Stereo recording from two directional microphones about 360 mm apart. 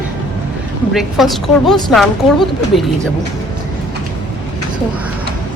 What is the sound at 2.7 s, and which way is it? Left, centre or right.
Speech, left.